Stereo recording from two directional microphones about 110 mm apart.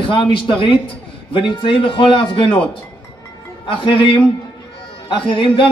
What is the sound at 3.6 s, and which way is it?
A man's voice, 55° left (ahead or behind).